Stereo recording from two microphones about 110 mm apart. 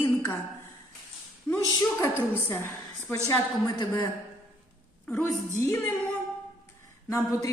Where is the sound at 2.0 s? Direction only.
20° left (ahead or behind).